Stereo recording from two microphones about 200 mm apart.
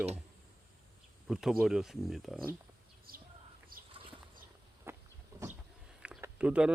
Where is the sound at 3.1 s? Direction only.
45° right (ahead or behind).